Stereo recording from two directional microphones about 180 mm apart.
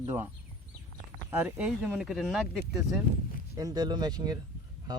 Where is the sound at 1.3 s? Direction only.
10° right (ahead or behind).